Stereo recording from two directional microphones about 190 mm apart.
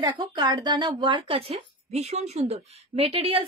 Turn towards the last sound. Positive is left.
turn(degrees=-30)  # may be behind; listen again after turning